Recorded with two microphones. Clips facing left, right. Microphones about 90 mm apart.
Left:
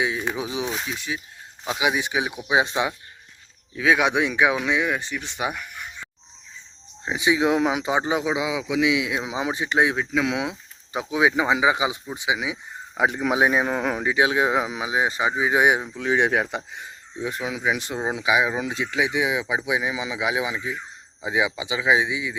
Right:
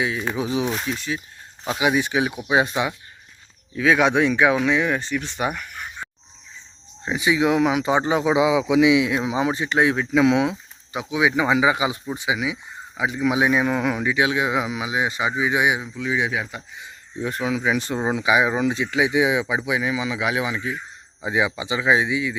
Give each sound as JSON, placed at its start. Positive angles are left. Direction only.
{"t": 0.0, "sound": "speech", "side_deg": 15}
{"t": 0.7, "sound": "speech", "side_deg": 0}
{"t": 0.9, "sound": "speech", "side_deg": 15}
{"t": 3.8, "sound": "speech", "side_deg": 15}
{"t": 7.0, "sound": "speech", "side_deg": 15}
{"t": 8.3, "sound": "speech", "side_deg": 0}
{"t": 9.0, "sound": "speech", "side_deg": 15}
{"t": 10.1, "sound": "speech", "side_deg": -5}
{"t": 11.1, "sound": "speech", "side_deg": 35}
{"t": 11.3, "sound": "speech", "side_deg": 20}
{"t": 13.0, "sound": "speech", "side_deg": 50}
{"t": 17.2, "sound": "speech", "side_deg": 10}
{"t": 19.5, "sound": "speech", "side_deg": 15}